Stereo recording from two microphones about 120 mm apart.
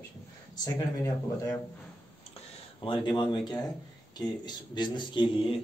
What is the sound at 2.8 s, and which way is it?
A man's voice, 40° left (ahead or behind).